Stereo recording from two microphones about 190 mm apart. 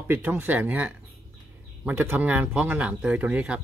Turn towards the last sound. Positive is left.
turn(degrees=-5)  # may be behind; listen again after turning